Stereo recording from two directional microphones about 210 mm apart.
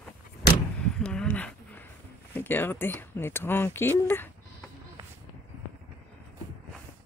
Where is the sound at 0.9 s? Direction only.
5° left (ahead or behind).